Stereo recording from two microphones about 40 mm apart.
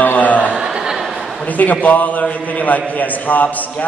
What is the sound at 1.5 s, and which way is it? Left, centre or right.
A man's voice, left.